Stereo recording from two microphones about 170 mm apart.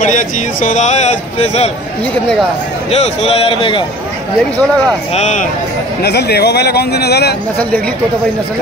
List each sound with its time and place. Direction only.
0.0 s a man's voice: 50° left (ahead or behind)
2.9 s a man's voice: 40° left (ahead or behind)
5.1 s a man's voice: 45° left (ahead or behind)
6.0 s speech: 75° left (ahead or behind)